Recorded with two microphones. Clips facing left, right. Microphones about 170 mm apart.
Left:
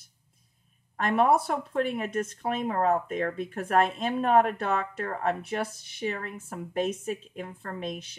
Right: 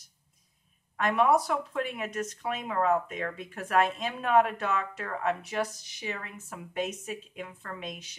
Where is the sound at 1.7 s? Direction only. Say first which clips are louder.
Left 4 dB; 45° left (ahead or behind).